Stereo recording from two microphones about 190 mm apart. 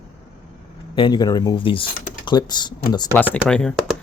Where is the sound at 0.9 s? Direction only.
25° left (ahead or behind).